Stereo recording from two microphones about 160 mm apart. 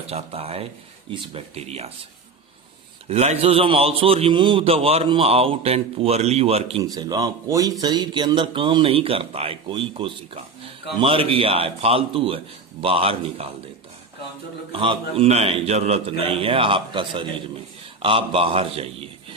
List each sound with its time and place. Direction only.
0.1 s a man's voice: 40° right (ahead or behind)
3.1 s a man's voice: 40° right (ahead or behind)
6.8 s a man's voice: 25° right (ahead or behind)
14.7 s a man's voice: 35° right (ahead or behind)